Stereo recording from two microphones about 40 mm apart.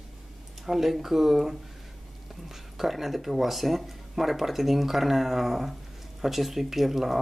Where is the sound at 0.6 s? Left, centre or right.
Centre.